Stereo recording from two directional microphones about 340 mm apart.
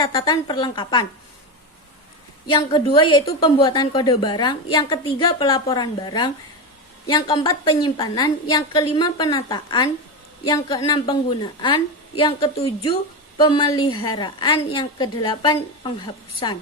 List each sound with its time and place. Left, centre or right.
0.0 s a woman's voice: centre
2.5 s a woman's voice: centre